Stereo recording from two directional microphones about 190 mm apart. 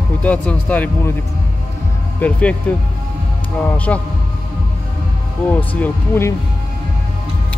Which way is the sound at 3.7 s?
10° left (ahead or behind).